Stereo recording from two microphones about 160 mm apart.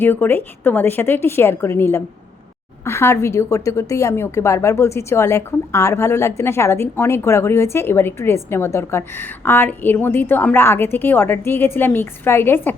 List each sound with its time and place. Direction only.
0.0 s a woman's voice: 10° left (ahead or behind)